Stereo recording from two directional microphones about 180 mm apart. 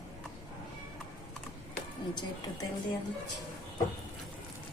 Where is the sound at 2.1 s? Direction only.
25° left (ahead or behind).